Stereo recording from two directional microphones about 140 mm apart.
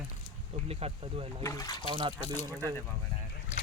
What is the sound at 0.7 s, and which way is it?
Speech, 45° right (ahead or behind).